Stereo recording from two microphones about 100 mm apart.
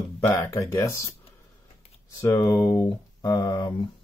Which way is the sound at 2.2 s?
30° left (ahead or behind).